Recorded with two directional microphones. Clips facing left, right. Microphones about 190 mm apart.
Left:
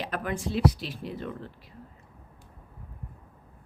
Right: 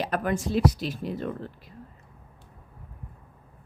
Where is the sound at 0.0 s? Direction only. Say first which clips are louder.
Right 4 dB; 40° right (ahead or behind).